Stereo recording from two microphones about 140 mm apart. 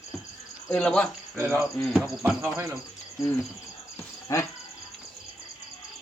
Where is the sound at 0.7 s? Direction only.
5° left (ahead or behind).